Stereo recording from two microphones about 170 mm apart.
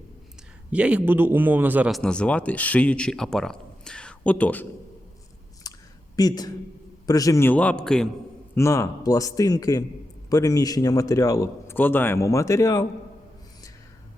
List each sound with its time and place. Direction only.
0.7 s a man's voice: 5° right (ahead or behind)
1.9 s speech: 5° left (ahead or behind)
5.7 s clicking: 25° left (ahead or behind)
6.1 s speech: 25° left (ahead or behind); by 8.1 s 5° left (ahead or behind)
8.5 s speech: 15° left (ahead or behind)